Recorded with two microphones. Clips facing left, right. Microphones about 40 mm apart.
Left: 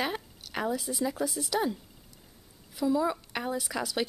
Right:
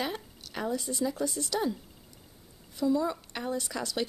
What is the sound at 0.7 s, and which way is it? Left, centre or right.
A woman's voice, centre.